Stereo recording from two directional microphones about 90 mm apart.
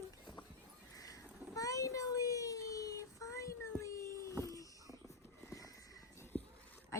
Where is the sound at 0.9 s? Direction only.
40° left (ahead or behind).